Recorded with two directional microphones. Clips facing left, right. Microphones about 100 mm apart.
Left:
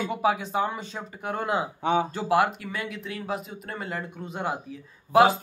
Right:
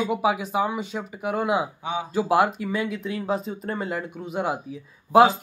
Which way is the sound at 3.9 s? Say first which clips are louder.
Right 4 dB; 15° right (ahead or behind).